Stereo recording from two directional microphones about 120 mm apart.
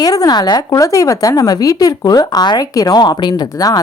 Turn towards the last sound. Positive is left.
turn(degrees=35)  # may be behind; listen again after turning